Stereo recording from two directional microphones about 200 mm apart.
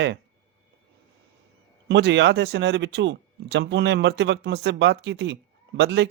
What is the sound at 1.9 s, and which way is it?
Speech, 60° right (ahead or behind).